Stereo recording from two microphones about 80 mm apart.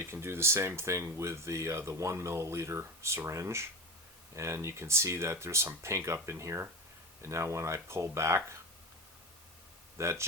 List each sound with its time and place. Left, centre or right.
0.0 s speech: right
10.0 s speech: right